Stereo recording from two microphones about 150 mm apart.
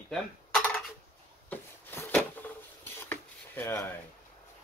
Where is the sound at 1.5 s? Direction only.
15° left (ahead or behind).